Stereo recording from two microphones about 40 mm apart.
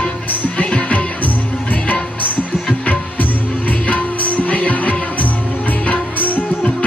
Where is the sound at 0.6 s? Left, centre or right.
Left.